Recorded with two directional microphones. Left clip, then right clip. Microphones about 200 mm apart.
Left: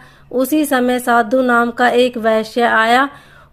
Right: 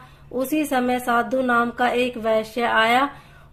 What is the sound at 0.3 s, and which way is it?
A woman's voice, 40° left (ahead or behind).